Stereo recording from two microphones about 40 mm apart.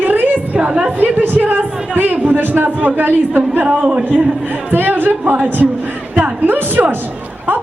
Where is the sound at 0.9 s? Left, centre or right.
Right.